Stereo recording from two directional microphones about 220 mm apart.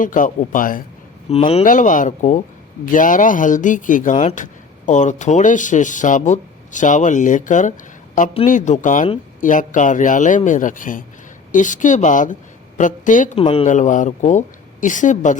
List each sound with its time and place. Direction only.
0.0 s a woman's voice: 35° left (ahead or behind)
1.3 s a woman's voice: 25° left (ahead or behind)